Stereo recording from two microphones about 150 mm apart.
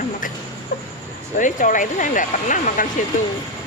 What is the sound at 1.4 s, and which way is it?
Speech, 60° left (ahead or behind).